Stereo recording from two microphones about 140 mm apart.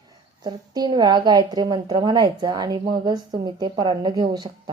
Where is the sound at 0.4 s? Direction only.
30° right (ahead or behind).